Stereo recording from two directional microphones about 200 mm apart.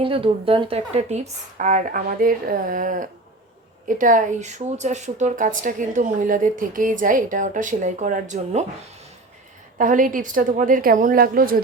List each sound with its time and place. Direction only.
0.0 s a woman's voice: 25° right (ahead or behind)
9.7 s a woman's voice: 40° right (ahead or behind)